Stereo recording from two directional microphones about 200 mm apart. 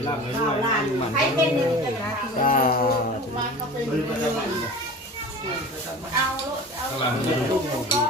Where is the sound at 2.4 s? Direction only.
45° left (ahead or behind).